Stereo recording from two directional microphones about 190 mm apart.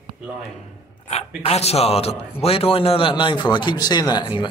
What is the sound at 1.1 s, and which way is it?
A man's voice, 35° left (ahead or behind).